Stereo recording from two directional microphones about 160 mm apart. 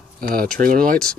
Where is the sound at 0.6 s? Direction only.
60° right (ahead or behind).